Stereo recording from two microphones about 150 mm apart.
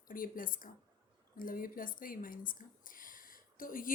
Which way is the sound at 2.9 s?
65° left (ahead or behind).